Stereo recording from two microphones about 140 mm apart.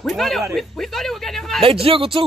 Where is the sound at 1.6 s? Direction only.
40° right (ahead or behind).